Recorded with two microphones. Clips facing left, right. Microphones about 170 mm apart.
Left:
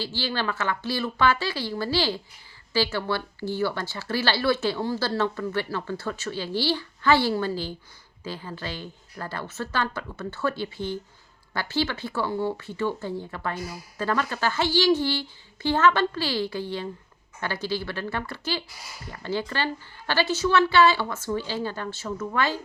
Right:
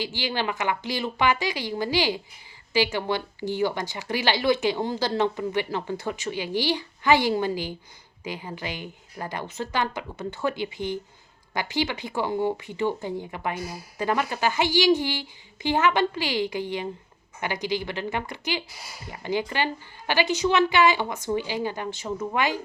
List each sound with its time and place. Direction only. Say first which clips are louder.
0.0 s speech: right 1 dB; 15° right (ahead or behind)